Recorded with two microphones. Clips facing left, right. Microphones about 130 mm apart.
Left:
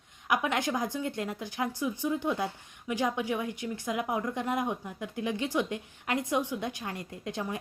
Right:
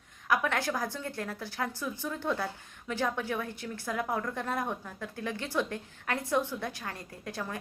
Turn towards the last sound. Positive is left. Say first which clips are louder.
# left 3 dB
turn(degrees=20)  # may be behind; listen again after turning